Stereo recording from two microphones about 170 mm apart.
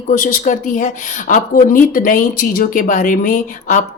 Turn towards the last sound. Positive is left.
turn(degrees=50)  # may be behind; listen again after turning